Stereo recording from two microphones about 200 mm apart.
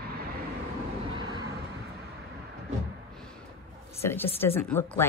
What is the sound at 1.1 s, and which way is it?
Vehicle, 20° right (ahead or behind).